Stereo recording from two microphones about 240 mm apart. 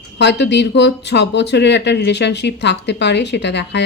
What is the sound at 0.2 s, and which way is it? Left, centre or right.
Speech, left.